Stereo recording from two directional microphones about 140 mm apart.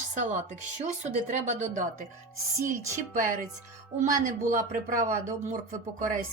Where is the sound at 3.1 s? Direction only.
70° right (ahead or behind).